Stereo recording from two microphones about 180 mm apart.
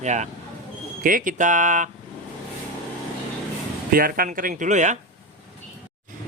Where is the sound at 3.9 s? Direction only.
55° right (ahead or behind).